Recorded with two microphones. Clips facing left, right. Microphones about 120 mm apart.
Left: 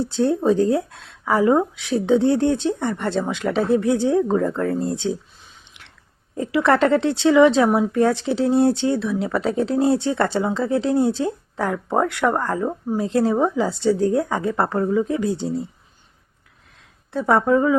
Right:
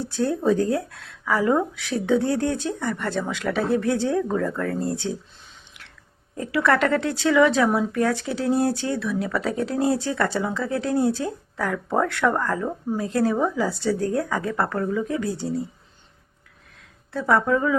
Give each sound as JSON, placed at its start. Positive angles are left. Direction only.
{"t": 0.1, "sound": "speech", "side_deg": 20}
{"t": 6.3, "sound": "speech", "side_deg": 25}
{"t": 17.1, "sound": "speech", "side_deg": 25}